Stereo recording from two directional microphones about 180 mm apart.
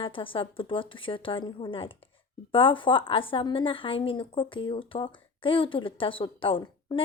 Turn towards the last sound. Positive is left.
turn(degrees=30)  # may be behind; listen again after turning